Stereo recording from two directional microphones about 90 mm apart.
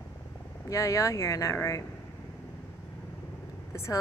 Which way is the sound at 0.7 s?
35° left (ahead or behind).